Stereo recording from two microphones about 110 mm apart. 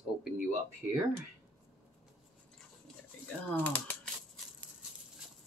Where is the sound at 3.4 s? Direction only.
15° left (ahead or behind).